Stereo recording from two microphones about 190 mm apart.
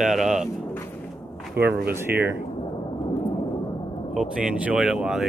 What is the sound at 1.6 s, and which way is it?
Speech, 55° right (ahead or behind).